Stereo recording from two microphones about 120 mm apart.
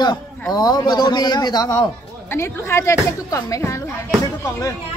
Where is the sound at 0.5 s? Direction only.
35° left (ahead or behind).